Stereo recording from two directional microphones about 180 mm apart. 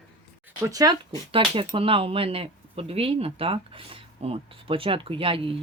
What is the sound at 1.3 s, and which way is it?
Speech, 30° right (ahead or behind).